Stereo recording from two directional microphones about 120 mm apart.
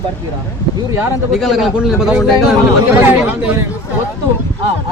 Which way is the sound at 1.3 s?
Centre (ahead or behind).